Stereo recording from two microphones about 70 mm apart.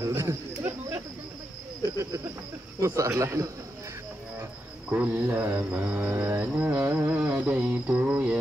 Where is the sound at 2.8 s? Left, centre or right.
Right.